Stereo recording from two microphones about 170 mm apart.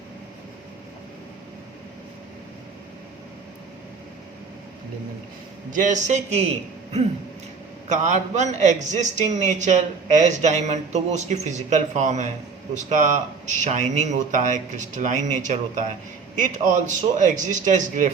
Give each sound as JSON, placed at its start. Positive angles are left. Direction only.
{"t": 5.7, "sound": "speech", "side_deg": -45}
{"t": 7.9, "sound": "speech", "side_deg": -45}